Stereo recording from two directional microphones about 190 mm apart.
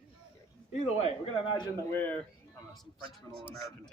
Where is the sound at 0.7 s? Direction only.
35° left (ahead or behind).